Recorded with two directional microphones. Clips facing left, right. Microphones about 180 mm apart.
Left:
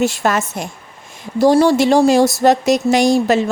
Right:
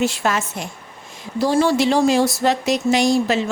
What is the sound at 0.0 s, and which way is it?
Speech, 45° left (ahead or behind).